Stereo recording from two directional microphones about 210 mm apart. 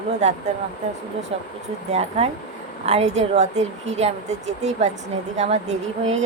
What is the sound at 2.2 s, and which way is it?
Speech, 30° right (ahead or behind).